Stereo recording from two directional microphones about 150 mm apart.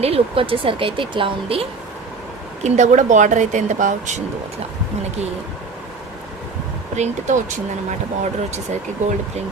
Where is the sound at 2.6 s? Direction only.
55° right (ahead or behind).